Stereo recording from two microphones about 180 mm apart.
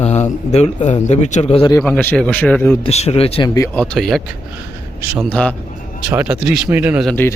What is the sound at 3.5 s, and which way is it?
Speech, 15° left (ahead or behind).